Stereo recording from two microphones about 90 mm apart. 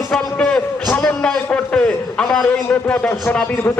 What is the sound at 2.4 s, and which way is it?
Speech, 20° left (ahead or behind).